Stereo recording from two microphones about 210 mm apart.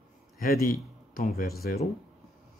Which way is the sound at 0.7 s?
40° left (ahead or behind).